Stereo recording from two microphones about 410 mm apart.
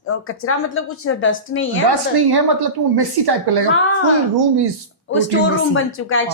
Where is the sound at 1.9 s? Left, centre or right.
Right.